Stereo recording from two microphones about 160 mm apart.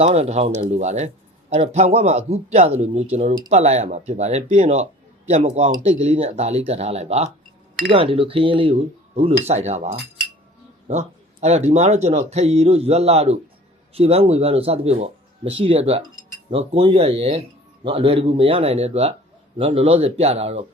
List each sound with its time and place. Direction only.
0.0 s speech: 40° right (ahead or behind)